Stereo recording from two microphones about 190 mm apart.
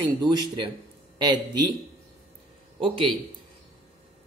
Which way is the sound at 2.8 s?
30° right (ahead or behind).